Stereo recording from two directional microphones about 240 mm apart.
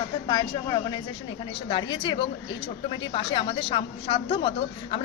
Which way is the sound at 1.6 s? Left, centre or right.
Centre.